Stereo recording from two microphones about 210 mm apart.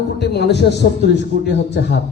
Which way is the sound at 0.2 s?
55° left (ahead or behind).